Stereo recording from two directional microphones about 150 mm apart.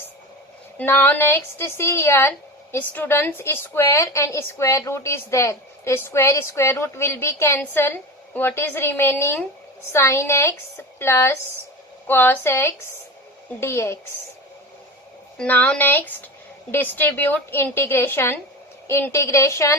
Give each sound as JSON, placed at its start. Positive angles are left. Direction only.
{"t": 0.8, "sound": "a woman's voice", "side_deg": 15}
{"t": 15.4, "sound": "a woman's voice", "side_deg": 5}